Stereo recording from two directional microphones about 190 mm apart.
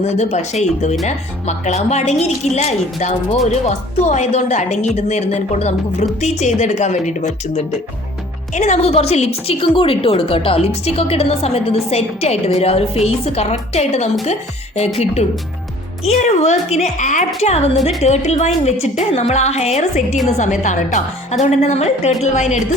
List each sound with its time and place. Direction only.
0.0 s a woman's voice: 35° left (ahead or behind)